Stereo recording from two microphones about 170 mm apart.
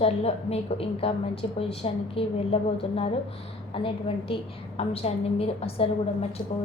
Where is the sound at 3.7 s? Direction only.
30° left (ahead or behind).